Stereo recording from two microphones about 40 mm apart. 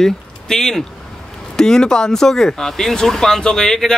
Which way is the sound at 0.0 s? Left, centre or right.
Centre.